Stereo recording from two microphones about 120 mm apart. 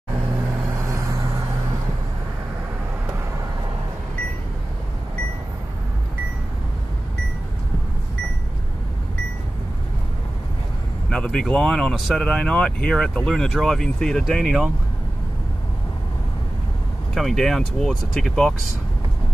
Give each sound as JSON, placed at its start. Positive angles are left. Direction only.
{"t": 0.7, "sound": "vehicle", "side_deg": -25}
{"t": 11.1, "sound": "speech", "side_deg": 10}
{"t": 17.1, "sound": "speech", "side_deg": 0}